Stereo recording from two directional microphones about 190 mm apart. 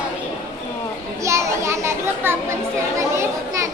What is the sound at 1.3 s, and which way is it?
Children playing, 15° right (ahead or behind).